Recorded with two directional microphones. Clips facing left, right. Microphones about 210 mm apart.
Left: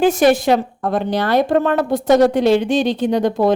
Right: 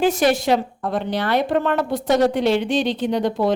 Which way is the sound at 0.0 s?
50° left (ahead or behind).